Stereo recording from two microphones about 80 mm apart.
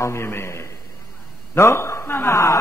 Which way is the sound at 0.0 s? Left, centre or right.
Left.